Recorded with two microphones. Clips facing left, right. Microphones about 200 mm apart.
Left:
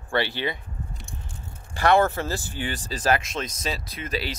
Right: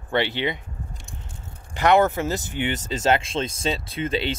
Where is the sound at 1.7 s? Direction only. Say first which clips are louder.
Right 2 dB; 20° right (ahead or behind).